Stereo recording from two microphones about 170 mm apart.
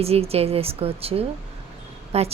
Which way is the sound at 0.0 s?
35° right (ahead or behind).